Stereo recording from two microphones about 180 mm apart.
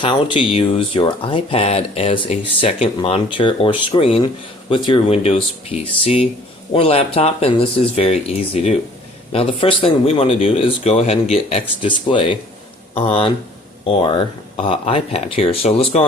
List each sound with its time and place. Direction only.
0.0 s speech: 30° left (ahead or behind)
9.3 s speech: 30° left (ahead or behind)